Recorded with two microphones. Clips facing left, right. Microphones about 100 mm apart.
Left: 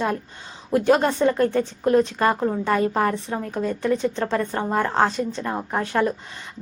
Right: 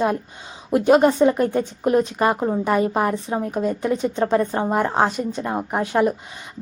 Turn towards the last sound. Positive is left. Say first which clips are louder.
# right 3 dB
turn(degrees=-15)  # may be behind; listen again after turning